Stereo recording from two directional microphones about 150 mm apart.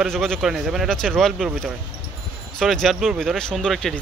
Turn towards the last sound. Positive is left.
turn(degrees=0)  # may be behind; listen again after turning